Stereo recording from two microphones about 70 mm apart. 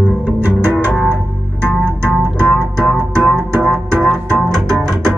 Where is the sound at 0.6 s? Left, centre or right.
Right.